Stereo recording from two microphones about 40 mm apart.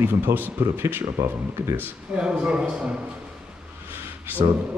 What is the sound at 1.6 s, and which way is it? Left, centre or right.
Speech, right.